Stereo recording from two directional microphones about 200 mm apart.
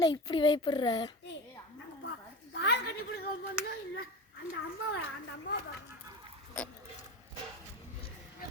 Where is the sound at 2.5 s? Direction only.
65° left (ahead or behind).